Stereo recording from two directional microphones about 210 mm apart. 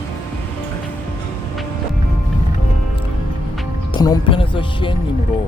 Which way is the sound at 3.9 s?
20° left (ahead or behind).